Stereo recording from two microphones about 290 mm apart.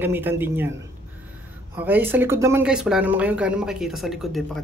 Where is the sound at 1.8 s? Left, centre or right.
Centre.